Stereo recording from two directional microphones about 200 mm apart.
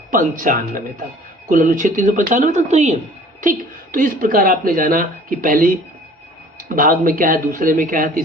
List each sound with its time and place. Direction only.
0.1 s a woman's voice: 40° right (ahead or behind)